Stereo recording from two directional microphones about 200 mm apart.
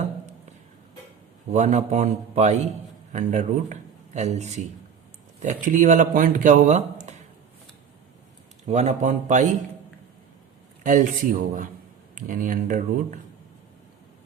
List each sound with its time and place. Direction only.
1.5 s a man's voice: 35° right (ahead or behind)
8.6 s speech: 35° right (ahead or behind)
10.8 s speech: 40° right (ahead or behind)